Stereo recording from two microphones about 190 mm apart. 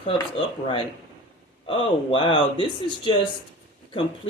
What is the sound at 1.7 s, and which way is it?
Speech, 25° left (ahead or behind).